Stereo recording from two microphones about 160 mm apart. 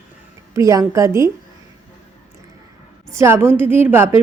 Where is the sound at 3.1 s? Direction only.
15° right (ahead or behind).